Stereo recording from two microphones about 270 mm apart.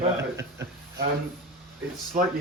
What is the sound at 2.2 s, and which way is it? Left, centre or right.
Speech, right.